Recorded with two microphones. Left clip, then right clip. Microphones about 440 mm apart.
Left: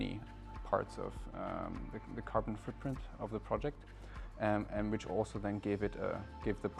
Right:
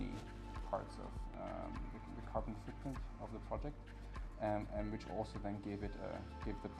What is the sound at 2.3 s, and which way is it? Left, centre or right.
Speech, left.